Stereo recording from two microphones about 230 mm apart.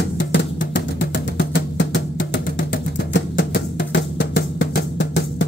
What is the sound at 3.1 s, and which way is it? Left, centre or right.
Drum, left.